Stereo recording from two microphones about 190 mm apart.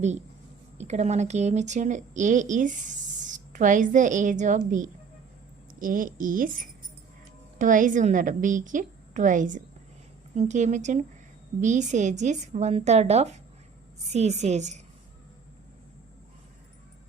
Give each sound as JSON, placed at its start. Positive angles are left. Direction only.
{"t": 0.8, "sound": "a woman's voice", "side_deg": -35}
{"t": 7.6, "sound": "a woman's voice", "side_deg": -45}